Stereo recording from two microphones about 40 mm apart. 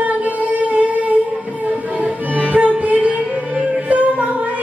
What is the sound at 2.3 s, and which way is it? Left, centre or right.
Music, right.